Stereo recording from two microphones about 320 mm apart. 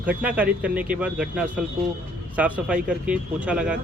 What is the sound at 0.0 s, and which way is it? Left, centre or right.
Speech, centre.